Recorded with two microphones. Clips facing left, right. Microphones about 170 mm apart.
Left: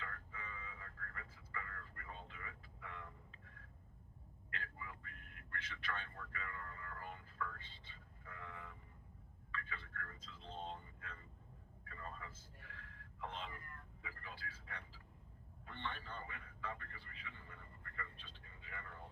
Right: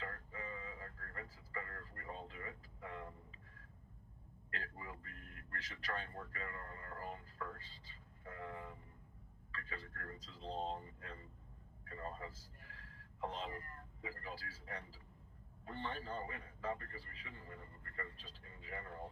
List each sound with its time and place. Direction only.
0.0 s vehicle: 35° right (ahead or behind)
4.5 s vehicle: 35° right (ahead or behind)
9.5 s speech: 35° right (ahead or behind)
11.9 s a sound: 35° right (ahead or behind)
14.0 s a man's voice: 35° right (ahead or behind)